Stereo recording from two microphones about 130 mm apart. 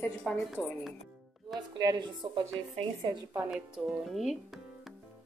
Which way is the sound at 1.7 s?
35° right (ahead or behind).